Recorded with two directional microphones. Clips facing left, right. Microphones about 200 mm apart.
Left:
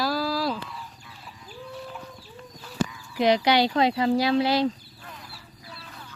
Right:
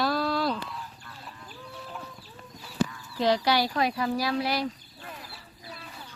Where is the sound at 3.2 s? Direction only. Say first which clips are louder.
Left 4 dB; 20° left (ahead or behind).